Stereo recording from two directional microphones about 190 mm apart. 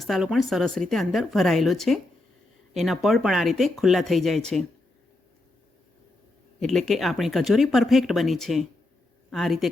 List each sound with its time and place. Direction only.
0.0 s speech: centre (ahead or behind)
6.6 s speech: centre (ahead or behind)